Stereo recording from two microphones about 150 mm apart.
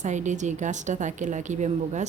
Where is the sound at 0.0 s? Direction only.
55° right (ahead or behind).